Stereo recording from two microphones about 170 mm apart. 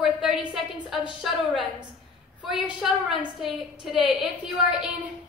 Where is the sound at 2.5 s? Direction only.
Centre (ahead or behind).